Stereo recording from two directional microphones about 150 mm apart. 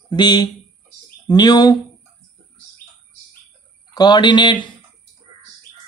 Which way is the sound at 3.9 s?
30° left (ahead or behind).